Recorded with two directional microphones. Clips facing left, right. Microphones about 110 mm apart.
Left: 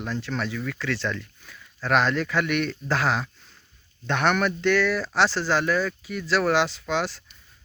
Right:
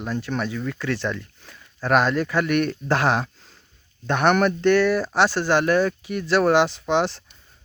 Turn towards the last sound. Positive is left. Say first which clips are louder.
# right 5 dB
turn(degrees=-20)  # may be behind; listen again after turning